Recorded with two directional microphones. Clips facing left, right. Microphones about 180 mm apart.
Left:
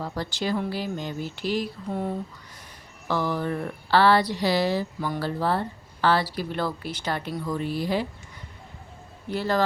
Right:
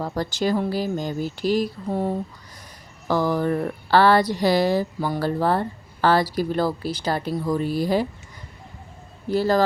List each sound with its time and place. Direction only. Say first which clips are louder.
0.0 s a woman's voice: right 5 dB; 45° right (ahead or behind)
9.3 s speech: right 5 dB; 40° right (ahead or behind)